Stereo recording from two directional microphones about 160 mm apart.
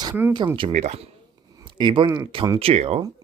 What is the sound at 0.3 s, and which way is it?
Speech, 30° right (ahead or behind).